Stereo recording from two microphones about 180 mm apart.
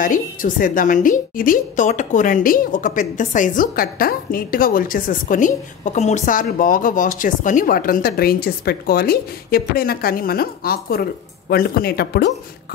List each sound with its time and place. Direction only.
0.0 s a woman's voice: 50° left (ahead or behind); by 12.4 s 65° left (ahead or behind)